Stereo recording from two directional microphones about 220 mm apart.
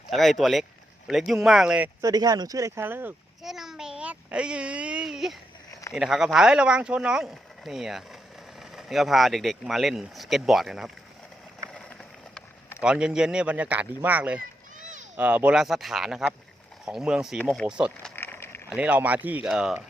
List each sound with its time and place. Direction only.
0.1 s speech: centre (ahead or behind)
2.0 s a child's voice: 15° right (ahead or behind); by 10.9 s centre (ahead or behind)
11.7 s vehicle: 5° left (ahead or behind)
12.8 s speech: 5° right (ahead or behind)
14.8 s a sound: 35° right (ahead or behind)
15.1 s speech: 5° right (ahead or behind)
18.2 s a sound: 10° left (ahead or behind)
18.7 s speech: 5° right (ahead or behind)